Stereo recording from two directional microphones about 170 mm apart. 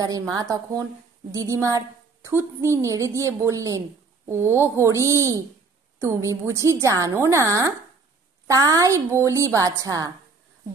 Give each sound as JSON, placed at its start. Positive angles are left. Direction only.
{"t": 0.0, "sound": "a woman's voice", "side_deg": -20}